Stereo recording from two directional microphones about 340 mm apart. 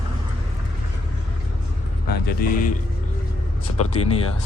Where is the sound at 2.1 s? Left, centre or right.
Left.